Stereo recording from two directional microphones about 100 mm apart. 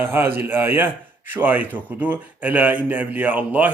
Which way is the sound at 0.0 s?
20° right (ahead or behind).